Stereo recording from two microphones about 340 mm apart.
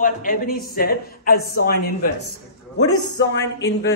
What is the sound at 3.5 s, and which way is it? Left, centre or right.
Speech, centre.